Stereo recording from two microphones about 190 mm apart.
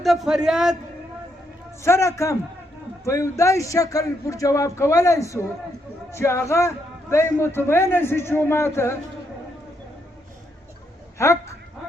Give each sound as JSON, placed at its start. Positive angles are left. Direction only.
{"t": 0.0, "sound": "a man's voice", "side_deg": 0}
{"t": 1.8, "sound": "a man's voice", "side_deg": 15}
{"t": 11.2, "sound": "a man's voice", "side_deg": 15}